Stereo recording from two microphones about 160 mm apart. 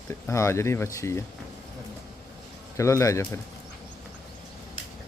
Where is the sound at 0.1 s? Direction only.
20° left (ahead or behind).